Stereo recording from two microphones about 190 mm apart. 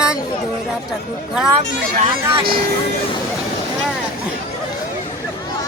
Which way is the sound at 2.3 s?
30° right (ahead or behind).